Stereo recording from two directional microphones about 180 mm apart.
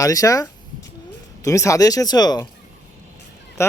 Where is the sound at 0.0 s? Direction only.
20° left (ahead or behind).